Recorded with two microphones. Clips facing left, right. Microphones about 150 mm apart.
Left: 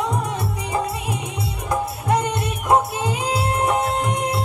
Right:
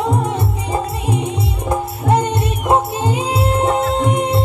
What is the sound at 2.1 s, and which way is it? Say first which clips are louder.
Music: right 5 dB; 30° right (ahead or behind).